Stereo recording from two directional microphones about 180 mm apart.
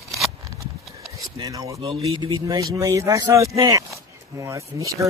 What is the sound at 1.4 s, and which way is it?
Speech, 20° right (ahead or behind).